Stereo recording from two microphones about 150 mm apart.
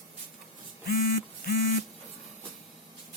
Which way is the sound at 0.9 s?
85° left.